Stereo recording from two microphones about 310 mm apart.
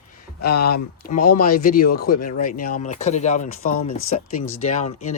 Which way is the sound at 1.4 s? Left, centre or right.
Left.